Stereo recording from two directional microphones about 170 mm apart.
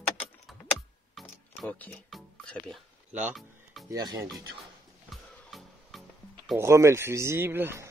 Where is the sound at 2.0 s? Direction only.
5° left (ahead or behind).